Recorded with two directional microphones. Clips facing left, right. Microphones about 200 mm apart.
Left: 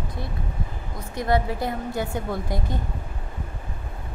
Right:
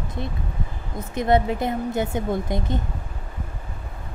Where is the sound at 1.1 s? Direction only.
20° right (ahead or behind).